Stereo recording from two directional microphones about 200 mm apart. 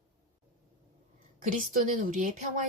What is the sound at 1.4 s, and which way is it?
Speech, 40° right (ahead or behind).